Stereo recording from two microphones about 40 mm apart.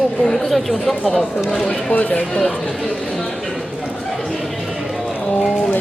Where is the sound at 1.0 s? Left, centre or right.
Left.